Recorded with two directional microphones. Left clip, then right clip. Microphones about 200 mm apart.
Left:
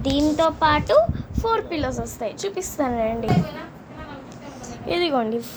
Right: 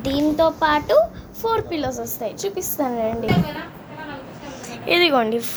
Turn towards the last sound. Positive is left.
turn(degrees=0)  # may be behind; listen again after turning